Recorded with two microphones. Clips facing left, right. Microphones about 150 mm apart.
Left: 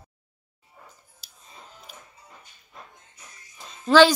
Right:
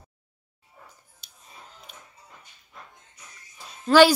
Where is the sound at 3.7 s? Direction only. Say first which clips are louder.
Even; 10° right (ahead or behind).